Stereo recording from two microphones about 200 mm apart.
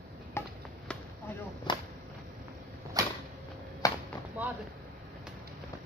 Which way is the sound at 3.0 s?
15° right (ahead or behind).